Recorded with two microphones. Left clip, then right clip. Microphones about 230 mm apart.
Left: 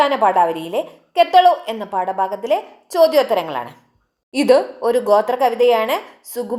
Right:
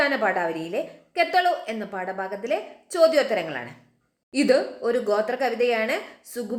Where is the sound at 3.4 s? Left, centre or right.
Left.